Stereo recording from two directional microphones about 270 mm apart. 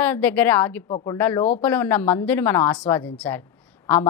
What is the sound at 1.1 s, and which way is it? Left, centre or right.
A woman's voice, centre.